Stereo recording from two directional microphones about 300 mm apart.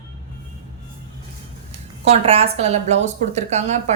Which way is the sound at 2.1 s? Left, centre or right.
Centre.